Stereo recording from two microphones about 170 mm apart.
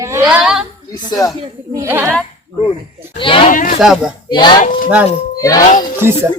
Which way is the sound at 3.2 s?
30° left (ahead or behind).